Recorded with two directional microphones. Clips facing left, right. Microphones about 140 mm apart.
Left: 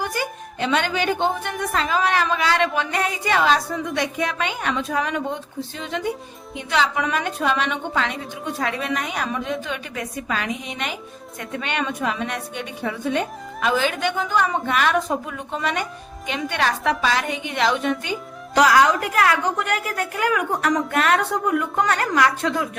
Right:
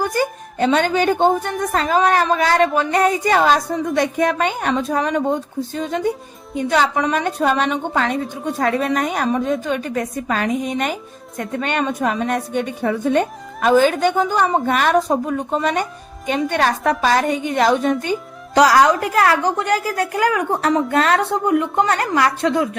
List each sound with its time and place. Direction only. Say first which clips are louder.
0.1 s a woman's voice: right 7 dB; 45° right (ahead or behind)